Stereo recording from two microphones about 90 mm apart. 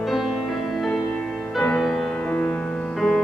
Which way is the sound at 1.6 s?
5° left (ahead or behind).